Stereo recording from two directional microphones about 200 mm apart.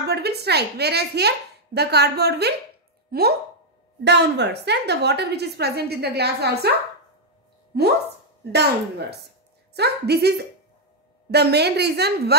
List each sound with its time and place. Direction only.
0.0 s a woman's voice: 55° right (ahead or behind)
8.5 s a woman's voice: 55° right (ahead or behind)